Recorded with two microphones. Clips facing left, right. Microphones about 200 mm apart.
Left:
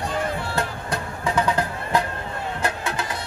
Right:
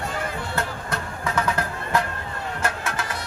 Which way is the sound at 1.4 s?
15° left (ahead or behind).